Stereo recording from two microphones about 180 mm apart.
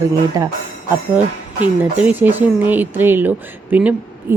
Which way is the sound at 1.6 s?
10° right (ahead or behind).